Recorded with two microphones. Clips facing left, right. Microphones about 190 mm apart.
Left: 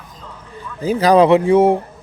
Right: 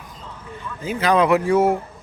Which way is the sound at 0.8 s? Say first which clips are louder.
Left 6 dB; 35° left (ahead or behind).